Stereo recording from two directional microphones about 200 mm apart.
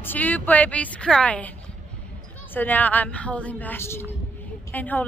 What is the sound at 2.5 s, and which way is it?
A woman's voice, 10° left (ahead or behind).